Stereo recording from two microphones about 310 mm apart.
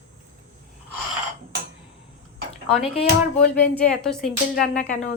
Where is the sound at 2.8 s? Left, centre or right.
Centre.